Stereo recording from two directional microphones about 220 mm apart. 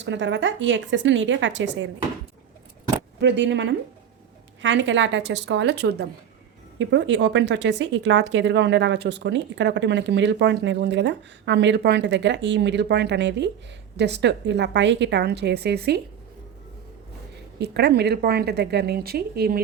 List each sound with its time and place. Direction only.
0.0 s speech: 55° right (ahead or behind)
3.2 s speech: 55° right (ahead or behind)
17.6 s speech: 50° right (ahead or behind)